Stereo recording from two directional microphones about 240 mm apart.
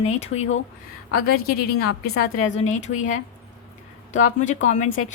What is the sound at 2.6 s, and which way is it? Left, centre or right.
Speech, left.